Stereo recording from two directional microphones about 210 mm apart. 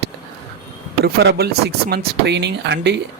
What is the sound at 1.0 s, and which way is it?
Speech, 50° right (ahead or behind).